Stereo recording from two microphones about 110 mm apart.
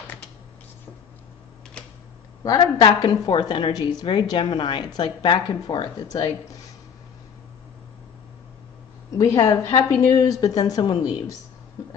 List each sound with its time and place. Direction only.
2.6 s a woman's voice: 40° left (ahead or behind)
9.2 s a woman's voice: 35° left (ahead or behind)